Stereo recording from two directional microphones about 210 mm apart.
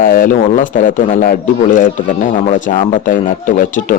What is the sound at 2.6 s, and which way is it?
Speech, 40° left (ahead or behind).